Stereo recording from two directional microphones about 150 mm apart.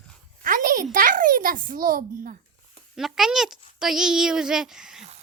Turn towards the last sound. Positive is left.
turn(degrees=-5)  # may be behind; listen again after turning